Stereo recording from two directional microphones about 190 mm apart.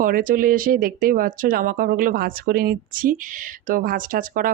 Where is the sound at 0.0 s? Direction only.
45° right (ahead or behind).